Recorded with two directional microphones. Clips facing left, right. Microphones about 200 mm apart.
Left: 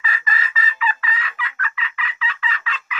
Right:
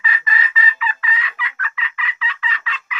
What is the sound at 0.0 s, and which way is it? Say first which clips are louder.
Fowl: right 2 dB; 45° left (ahead or behind).